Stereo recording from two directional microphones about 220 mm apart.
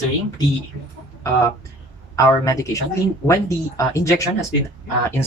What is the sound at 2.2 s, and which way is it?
Speech, 15° left (ahead or behind).